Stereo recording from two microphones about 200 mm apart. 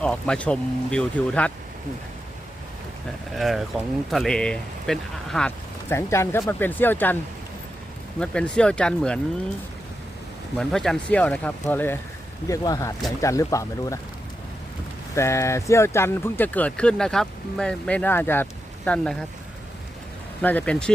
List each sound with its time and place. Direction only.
0.0 s speech: 5° left (ahead or behind)
3.3 s speech: centre (ahead or behind)
8.2 s speech: 5° left (ahead or behind)
10.6 s speech: centre (ahead or behind)
15.1 s speech: 15° left (ahead or behind)
20.4 s speech: 10° left (ahead or behind)